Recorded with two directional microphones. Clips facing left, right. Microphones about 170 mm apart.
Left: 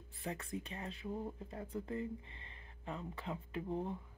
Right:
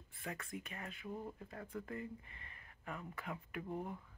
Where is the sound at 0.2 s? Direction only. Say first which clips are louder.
Left 4 dB; 30° left (ahead or behind).